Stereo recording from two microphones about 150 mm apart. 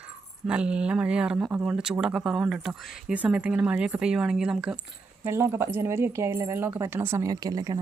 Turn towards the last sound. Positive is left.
turn(degrees=-25)  # may be behind; listen again after turning